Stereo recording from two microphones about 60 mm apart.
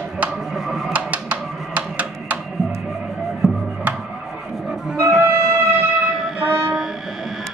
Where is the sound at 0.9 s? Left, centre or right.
Right.